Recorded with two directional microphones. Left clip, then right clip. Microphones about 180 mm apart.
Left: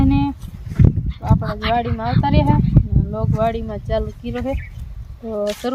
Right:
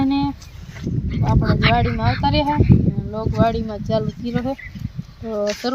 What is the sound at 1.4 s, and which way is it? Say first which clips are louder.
Speech: right 5 dB; 20° left (ahead or behind).